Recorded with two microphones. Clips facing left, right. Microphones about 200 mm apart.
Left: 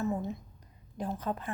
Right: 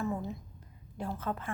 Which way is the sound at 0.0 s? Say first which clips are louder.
Left 2 dB; 20° left (ahead or behind).